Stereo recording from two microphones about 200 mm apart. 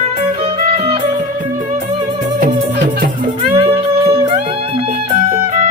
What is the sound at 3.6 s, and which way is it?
Music, 30° right (ahead or behind).